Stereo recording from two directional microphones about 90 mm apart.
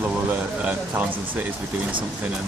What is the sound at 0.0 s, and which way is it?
Speech, 15° right (ahead or behind).